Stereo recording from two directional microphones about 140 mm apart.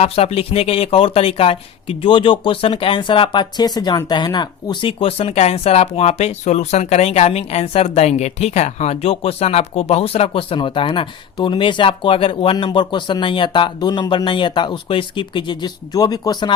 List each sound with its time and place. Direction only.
0.0 s speech: 45° left (ahead or behind)